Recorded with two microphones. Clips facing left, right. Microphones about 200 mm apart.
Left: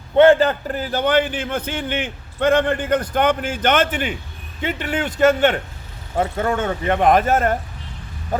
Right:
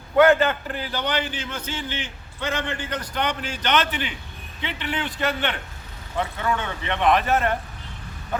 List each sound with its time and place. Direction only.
0.2 s a man's voice: 30° left (ahead or behind)
8.3 s bow-wow: 40° left (ahead or behind)